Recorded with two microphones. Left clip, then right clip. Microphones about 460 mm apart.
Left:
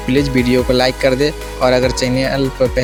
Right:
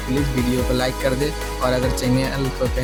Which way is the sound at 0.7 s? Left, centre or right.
Right.